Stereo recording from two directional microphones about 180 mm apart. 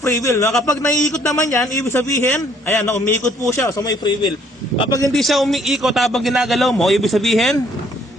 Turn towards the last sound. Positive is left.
turn(degrees=0)  # may be behind; listen again after turning